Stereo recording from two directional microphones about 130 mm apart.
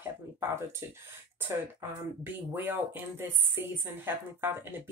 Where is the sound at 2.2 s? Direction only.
15° right (ahead or behind).